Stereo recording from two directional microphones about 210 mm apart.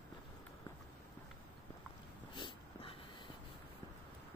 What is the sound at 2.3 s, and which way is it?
Dog, 20° left (ahead or behind).